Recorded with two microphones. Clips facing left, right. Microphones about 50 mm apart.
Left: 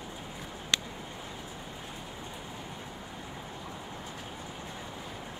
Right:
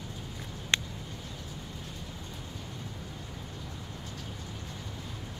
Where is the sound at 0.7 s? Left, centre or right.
Right.